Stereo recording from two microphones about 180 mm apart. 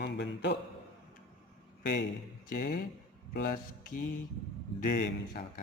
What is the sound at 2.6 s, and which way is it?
Speech, 50° left (ahead or behind).